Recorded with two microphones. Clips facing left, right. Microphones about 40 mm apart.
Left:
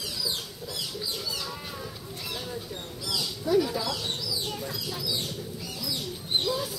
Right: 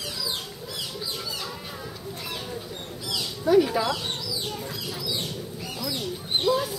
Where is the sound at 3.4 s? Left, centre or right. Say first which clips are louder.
Right 5 dB; right.